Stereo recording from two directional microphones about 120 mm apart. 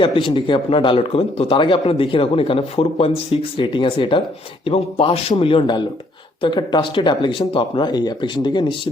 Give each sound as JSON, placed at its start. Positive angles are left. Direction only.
{"t": 0.0, "sound": "speech", "side_deg": 45}